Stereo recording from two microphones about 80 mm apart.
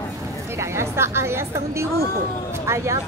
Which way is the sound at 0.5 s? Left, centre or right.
Right.